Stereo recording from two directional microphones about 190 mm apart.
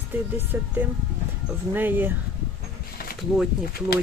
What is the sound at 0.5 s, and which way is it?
Speech, 10° right (ahead or behind).